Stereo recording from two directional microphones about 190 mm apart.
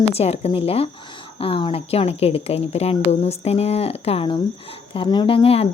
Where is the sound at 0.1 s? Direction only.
35° left (ahead or behind).